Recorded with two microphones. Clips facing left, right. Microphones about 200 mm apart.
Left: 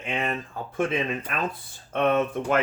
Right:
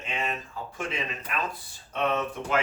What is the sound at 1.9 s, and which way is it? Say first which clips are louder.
Speech: left 5 dB; 55° left (ahead or behind).